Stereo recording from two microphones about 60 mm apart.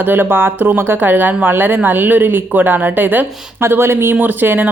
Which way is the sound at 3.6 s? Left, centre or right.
Right.